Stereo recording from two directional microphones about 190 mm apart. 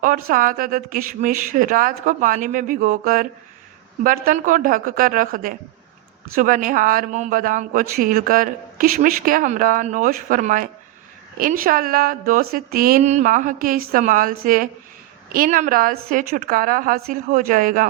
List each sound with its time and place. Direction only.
0.0 s speech: 45° right (ahead or behind)